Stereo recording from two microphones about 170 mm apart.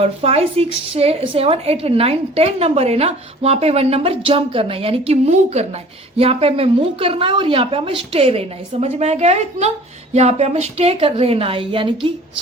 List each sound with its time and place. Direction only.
0.0 s a woman's voice: 35° right (ahead or behind)